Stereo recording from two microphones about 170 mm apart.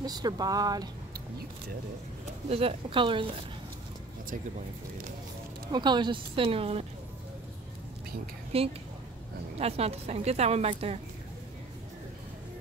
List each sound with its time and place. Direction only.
0.0 s speech: 25° right (ahead or behind)
2.5 s a woman's voice: 30° right (ahead or behind)
5.7 s a woman's voice: 25° right (ahead or behind)
8.5 s a woman's voice: 35° right (ahead or behind)